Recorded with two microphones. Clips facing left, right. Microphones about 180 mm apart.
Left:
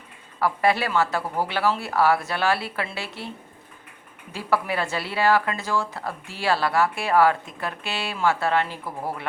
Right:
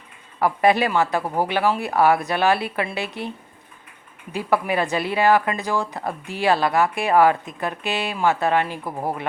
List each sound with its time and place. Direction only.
0.3 s speech: 20° right (ahead or behind)